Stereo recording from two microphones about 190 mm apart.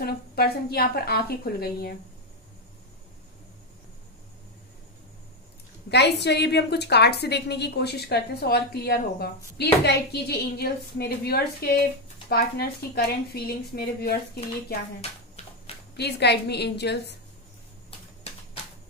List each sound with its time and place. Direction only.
0.0 s a woman's voice: 55° left (ahead or behind)
5.9 s a woman's voice: 60° left (ahead or behind)
15.0 s a sound: 35° left (ahead or behind)
16.0 s a woman's voice: 60° left (ahead or behind)